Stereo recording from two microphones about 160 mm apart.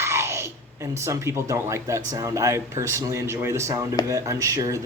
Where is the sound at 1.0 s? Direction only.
15° right (ahead or behind).